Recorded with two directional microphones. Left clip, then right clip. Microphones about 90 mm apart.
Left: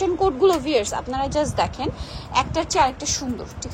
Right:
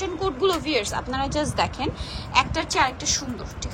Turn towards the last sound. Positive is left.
turn(degrees=55)  # may be behind; listen again after turning